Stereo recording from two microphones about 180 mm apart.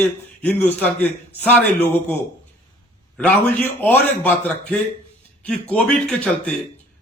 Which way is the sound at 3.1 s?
10° left (ahead or behind).